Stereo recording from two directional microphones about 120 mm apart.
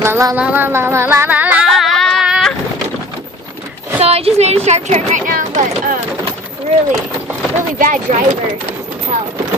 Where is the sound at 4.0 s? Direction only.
60° right (ahead or behind); by 5.9 s 90° right.